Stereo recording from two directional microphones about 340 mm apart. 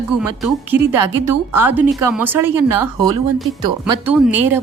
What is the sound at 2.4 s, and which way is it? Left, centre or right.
Speech, right.